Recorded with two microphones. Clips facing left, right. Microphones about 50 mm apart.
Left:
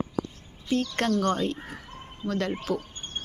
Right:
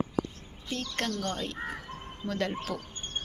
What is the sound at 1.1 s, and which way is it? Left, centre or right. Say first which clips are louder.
Speech: left 12 dB; left.